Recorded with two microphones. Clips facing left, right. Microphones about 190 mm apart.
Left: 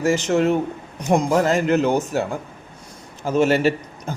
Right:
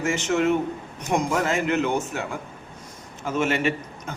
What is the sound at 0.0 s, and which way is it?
A man's voice, 35° left (ahead or behind).